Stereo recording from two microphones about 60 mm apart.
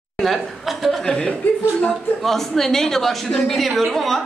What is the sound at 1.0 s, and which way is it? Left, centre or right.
A woman's voice, centre.